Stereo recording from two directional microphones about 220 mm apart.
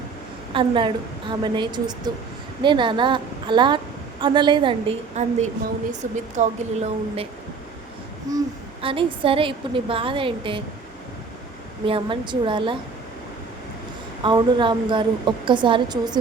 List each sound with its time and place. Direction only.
0.5 s a woman's voice: 20° right (ahead or behind)
8.8 s a woman's voice: 25° right (ahead or behind)
11.9 s a woman's voice: 25° right (ahead or behind)
14.2 s a woman's voice: 20° right (ahead or behind)